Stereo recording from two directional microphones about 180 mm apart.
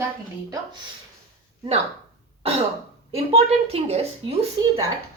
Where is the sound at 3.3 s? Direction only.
35° right (ahead or behind).